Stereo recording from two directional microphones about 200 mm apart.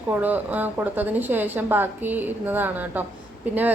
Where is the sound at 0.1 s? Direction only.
10° right (ahead or behind).